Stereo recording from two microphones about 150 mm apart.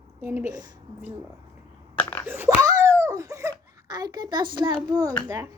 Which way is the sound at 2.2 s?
15° right (ahead or behind).